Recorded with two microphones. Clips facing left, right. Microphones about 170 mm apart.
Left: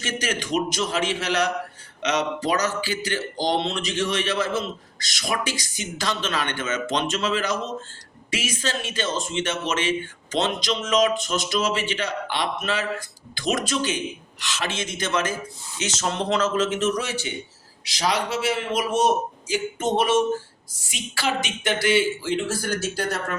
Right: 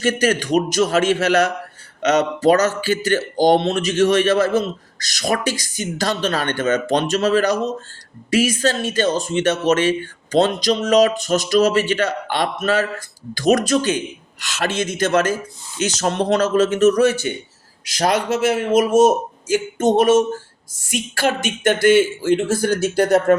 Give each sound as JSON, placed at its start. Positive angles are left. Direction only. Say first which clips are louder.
{"t": 0.0, "sound": "speech", "louder": "right 10 dB", "side_deg": -45}